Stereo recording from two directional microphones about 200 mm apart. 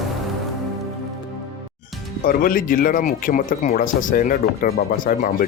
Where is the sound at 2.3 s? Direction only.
45° left (ahead or behind).